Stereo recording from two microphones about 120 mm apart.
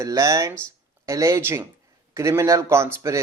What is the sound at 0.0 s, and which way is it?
Speech, 25° right (ahead or behind).